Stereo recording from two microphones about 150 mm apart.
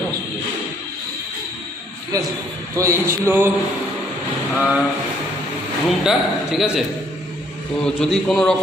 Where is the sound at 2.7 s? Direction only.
20° right (ahead or behind).